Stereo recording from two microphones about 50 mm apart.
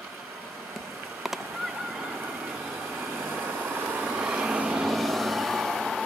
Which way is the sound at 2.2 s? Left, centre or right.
Right.